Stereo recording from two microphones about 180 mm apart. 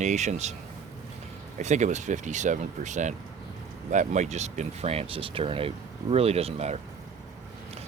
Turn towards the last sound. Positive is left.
turn(degrees=-35)  # may be behind; listen again after turning